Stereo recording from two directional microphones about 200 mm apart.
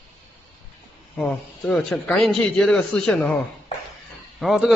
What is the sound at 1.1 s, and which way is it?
A man's voice, 5° left (ahead or behind).